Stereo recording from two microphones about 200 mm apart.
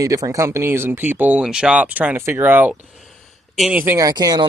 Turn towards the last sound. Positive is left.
turn(degrees=-20)  # may be behind; listen again after turning